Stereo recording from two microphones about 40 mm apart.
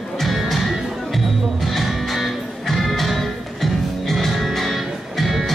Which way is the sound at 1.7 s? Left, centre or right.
Centre.